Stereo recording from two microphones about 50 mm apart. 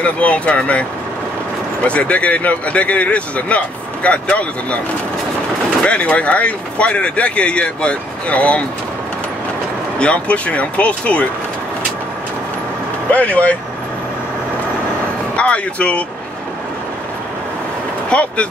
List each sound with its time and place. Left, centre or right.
0.0 s speech: left
1.9 s speech: left
5.9 s speech: left
9.9 s speech: left
13.1 s speech: left
15.3 s speech: left
18.1 s speech: left